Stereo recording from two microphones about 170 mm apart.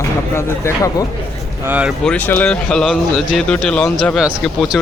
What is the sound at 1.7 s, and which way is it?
Speech, 5° right (ahead or behind).